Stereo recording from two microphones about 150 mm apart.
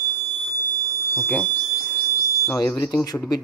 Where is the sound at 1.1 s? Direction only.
10° left (ahead or behind).